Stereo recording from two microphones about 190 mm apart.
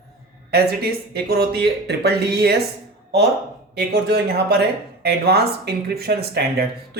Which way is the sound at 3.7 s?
60° right (ahead or behind).